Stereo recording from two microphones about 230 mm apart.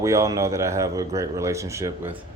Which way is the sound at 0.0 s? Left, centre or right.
Centre.